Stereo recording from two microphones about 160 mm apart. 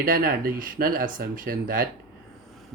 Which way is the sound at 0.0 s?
60° right (ahead or behind).